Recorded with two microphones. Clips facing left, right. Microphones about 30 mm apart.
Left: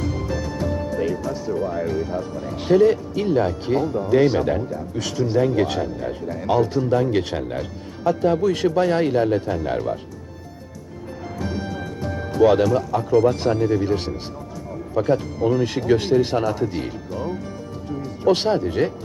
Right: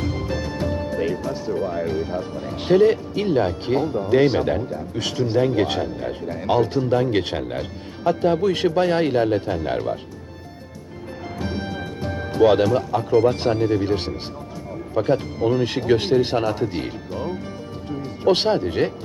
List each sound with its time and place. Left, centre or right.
0.0 s speech: right
11.3 s speech: right